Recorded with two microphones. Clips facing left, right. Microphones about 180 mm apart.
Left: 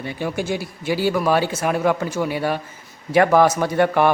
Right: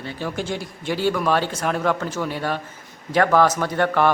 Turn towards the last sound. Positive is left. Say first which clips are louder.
# left 2 dB
turn(degrees=10)  # may be behind; listen again after turning